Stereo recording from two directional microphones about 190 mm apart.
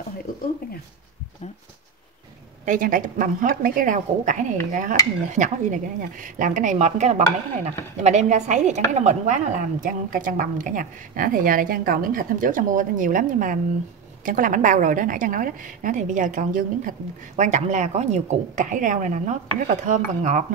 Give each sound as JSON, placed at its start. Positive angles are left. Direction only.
{"t": 2.6, "sound": "a woman's voice", "side_deg": -45}